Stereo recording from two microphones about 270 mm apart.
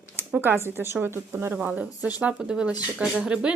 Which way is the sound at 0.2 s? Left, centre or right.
Centre.